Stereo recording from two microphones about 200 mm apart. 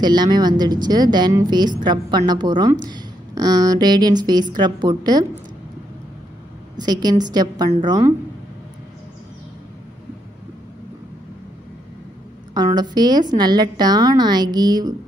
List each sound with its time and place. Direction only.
0.0 s speech: 20° right (ahead or behind)
6.8 s speech: 20° right (ahead or behind)
12.5 s a woman's voice: 20° right (ahead or behind)